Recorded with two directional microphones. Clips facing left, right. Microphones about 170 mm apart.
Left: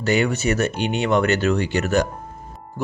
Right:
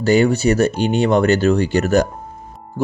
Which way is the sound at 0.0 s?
35° right (ahead or behind).